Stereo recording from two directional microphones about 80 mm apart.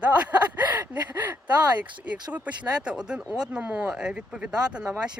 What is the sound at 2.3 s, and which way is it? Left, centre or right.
Speech, centre.